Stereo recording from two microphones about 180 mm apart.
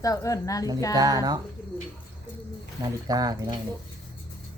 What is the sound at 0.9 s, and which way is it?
Speech, 20° right (ahead or behind).